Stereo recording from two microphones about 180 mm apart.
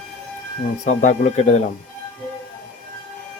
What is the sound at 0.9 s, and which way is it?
Speech, 40° left (ahead or behind).